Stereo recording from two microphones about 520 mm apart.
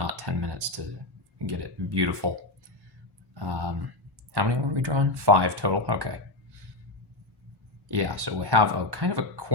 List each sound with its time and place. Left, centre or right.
0.0 s a sound: right
1.5 s speech: right
3.3 s speech: right
7.9 s speech: right